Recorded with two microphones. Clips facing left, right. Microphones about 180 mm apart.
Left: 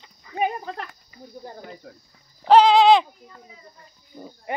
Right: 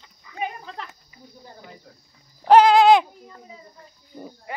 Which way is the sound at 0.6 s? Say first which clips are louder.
Left 4 dB; 50° left (ahead or behind).